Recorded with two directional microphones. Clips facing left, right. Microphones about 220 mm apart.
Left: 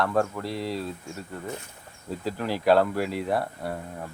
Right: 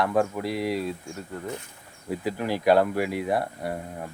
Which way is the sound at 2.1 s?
15° right (ahead or behind).